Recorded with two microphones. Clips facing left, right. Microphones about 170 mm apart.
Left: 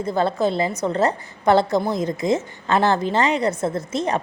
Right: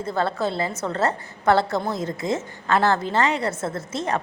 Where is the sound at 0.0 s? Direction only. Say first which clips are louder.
Left 4 dB; 15° left (ahead or behind).